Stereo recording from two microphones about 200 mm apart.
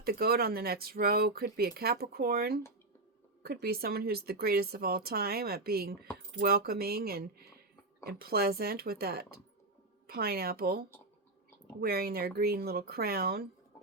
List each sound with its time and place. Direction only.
0.0 s speech: 50° right (ahead or behind)